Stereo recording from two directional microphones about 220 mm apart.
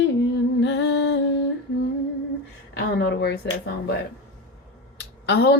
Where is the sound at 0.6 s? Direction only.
55° left (ahead or behind).